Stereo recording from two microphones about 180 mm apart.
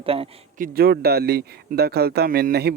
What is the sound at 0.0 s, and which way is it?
Speech, 30° right (ahead or behind).